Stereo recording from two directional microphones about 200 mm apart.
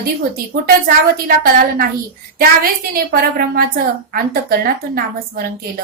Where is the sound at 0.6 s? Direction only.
45° right (ahead or behind).